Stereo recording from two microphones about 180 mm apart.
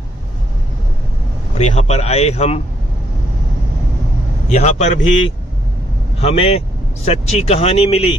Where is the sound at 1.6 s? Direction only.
35° left (ahead or behind).